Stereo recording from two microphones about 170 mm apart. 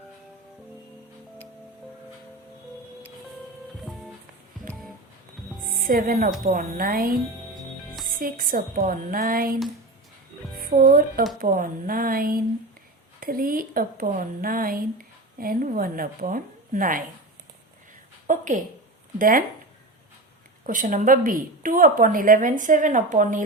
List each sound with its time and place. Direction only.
3.8 s music: centre (ahead or behind)
5.6 s a woman's voice: 55° right (ahead or behind)
8.2 s a woman's voice: 55° right (ahead or behind)
10.6 s a woman's voice: 55° right (ahead or behind)
18.3 s a woman's voice: 50° right (ahead or behind)
20.7 s a woman's voice: 50° right (ahead or behind)